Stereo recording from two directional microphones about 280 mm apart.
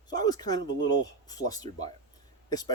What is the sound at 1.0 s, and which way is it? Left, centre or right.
Speech, centre.